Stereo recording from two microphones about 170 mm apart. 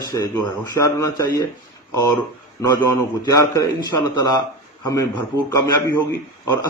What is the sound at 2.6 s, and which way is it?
A man's voice, 20° left (ahead or behind).